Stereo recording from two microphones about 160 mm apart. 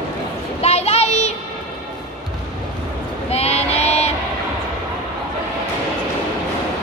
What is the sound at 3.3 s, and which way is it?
Child singing, 40° left (ahead or behind).